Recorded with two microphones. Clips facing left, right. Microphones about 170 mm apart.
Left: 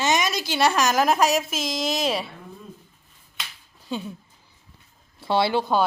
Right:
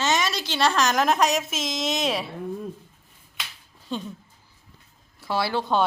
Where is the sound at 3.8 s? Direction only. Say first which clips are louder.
Left 1 dB; 5° left (ahead or behind).